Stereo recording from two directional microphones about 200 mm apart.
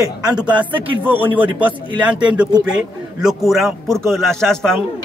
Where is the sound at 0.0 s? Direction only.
20° right (ahead or behind).